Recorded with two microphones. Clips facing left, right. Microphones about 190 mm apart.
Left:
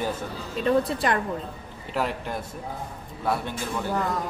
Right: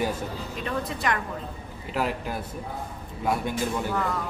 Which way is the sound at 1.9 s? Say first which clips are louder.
Even; 5° right (ahead or behind).